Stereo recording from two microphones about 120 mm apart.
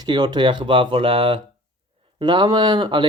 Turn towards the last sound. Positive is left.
turn(degrees=-40)  # may be behind; listen again after turning